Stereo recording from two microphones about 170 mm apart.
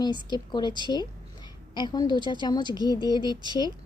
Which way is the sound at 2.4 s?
25° left (ahead or behind).